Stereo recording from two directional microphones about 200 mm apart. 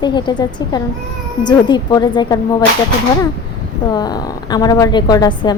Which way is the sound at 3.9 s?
20° left (ahead or behind).